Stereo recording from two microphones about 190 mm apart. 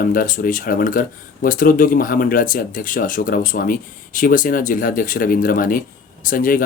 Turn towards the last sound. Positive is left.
turn(degrees=45)  # may be behind; listen again after turning